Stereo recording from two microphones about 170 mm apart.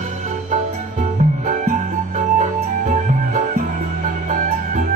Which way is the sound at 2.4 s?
45° right (ahead or behind).